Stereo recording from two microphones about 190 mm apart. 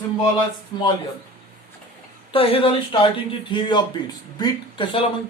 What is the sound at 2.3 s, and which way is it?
A man's voice, 30° left (ahead or behind).